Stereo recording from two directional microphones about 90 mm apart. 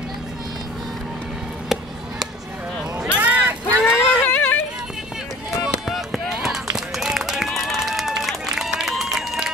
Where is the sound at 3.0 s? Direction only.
15° right (ahead or behind).